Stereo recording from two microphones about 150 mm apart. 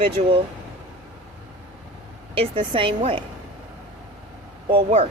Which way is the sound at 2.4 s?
35° right (ahead or behind).